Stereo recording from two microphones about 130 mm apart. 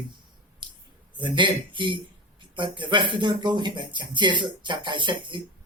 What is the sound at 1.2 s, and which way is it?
Speech, 35° right (ahead or behind).